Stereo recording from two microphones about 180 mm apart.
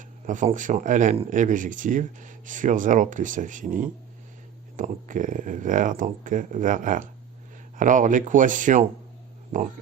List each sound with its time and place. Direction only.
0.3 s speech: 45° right (ahead or behind)